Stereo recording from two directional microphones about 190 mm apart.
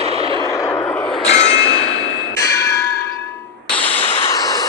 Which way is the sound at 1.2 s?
35° left (ahead or behind).